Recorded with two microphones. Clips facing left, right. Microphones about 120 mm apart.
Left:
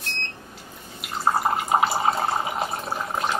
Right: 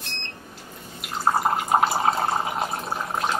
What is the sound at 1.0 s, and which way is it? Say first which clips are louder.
Drip: even; centre (ahead or behind).